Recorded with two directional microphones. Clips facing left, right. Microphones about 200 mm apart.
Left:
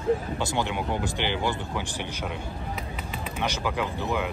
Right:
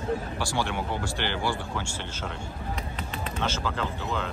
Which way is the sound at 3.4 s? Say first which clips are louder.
Left 2 dB; 15° left (ahead or behind).